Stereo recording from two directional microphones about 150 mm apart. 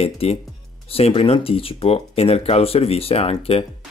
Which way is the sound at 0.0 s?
40° left (ahead or behind).